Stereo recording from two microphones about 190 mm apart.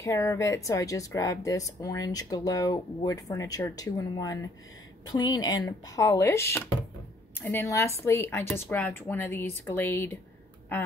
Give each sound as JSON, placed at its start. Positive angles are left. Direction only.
{"t": 0.0, "sound": "speech", "side_deg": 15}